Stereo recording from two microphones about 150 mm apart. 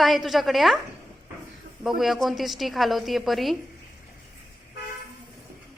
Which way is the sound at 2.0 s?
Centre (ahead or behind).